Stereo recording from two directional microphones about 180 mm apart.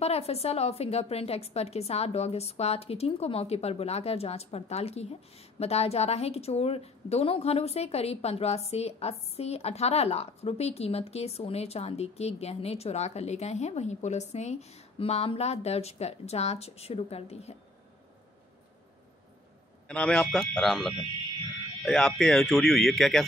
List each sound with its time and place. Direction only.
0.0 s a woman's voice: 35° left (ahead or behind)
19.9 s speech: 5° left (ahead or behind)